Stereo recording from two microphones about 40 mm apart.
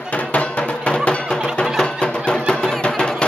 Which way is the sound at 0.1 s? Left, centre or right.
Left.